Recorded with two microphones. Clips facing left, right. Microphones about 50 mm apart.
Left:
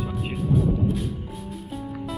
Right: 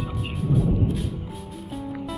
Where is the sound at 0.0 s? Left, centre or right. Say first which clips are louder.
Left 1 dB; centre.